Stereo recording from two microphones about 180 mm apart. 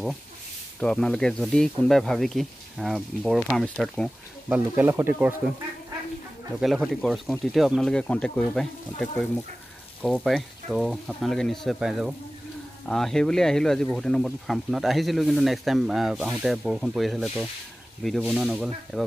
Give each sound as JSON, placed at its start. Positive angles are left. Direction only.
{"t": 0.7, "sound": "speech", "side_deg": 5}
{"t": 4.5, "sound": "speech", "side_deg": -10}
{"t": 6.6, "sound": "speech", "side_deg": 0}